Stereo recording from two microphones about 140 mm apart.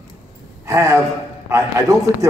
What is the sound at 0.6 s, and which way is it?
A man's voice, 20° right (ahead or behind).